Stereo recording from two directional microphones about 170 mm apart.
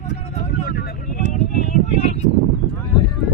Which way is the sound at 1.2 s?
45° left (ahead or behind).